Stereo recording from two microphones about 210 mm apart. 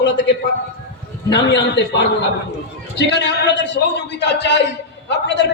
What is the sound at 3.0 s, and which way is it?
A man's voice, 55° left (ahead or behind).